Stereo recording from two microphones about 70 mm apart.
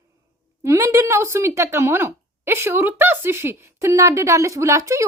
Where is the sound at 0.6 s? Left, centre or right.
Right.